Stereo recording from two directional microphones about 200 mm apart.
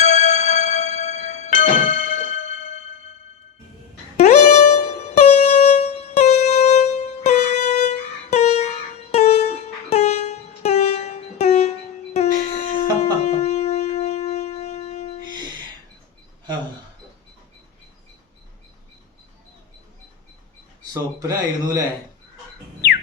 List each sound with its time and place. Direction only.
0.0 s music: 35° left (ahead or behind)
4.2 s music: 35° left (ahead or behind)
20.9 s speech: 15° right (ahead or behind)